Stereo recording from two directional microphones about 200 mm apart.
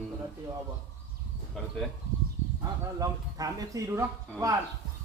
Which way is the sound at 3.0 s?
15° right (ahead or behind).